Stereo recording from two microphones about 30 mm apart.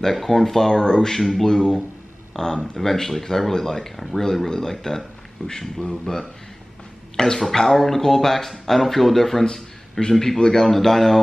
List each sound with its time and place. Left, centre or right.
0.1 s speech: centre
4.5 s speech: centre
9.4 s a man's voice: centre